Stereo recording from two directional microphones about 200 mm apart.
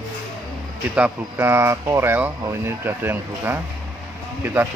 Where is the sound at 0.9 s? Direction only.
10° right (ahead or behind).